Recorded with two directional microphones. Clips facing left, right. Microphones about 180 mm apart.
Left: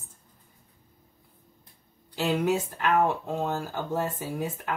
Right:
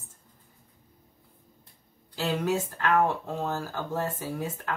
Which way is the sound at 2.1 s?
15° left (ahead or behind).